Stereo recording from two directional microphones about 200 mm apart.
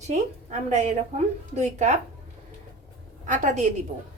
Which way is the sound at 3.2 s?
40° right (ahead or behind).